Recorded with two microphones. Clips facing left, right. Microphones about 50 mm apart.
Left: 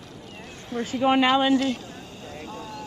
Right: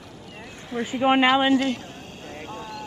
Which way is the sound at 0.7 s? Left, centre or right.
Right.